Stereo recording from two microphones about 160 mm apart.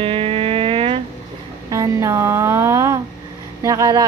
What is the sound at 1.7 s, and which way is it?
Music, 20° right (ahead or behind).